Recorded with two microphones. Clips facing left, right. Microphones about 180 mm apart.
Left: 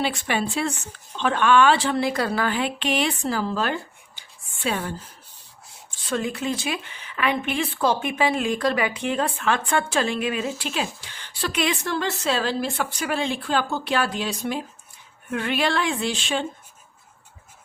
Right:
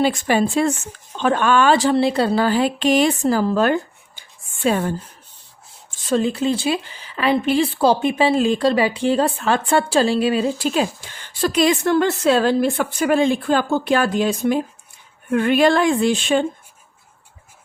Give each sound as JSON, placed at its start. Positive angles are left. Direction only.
{"t": 0.0, "sound": "speech", "side_deg": -45}
{"t": 6.0, "sound": "speech", "side_deg": -35}